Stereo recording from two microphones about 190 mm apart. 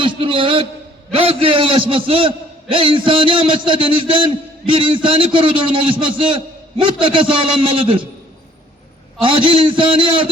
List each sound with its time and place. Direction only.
0.0 s a man's voice: 25° right (ahead or behind)
9.2 s a man's voice: 30° right (ahead or behind)